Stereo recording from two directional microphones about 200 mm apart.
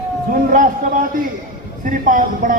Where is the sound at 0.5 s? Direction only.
40° right (ahead or behind).